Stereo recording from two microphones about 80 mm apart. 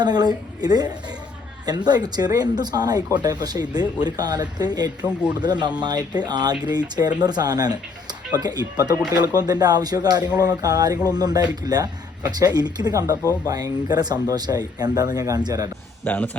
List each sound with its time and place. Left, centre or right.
0.0 s speech: right
16.0 s a man's voice: left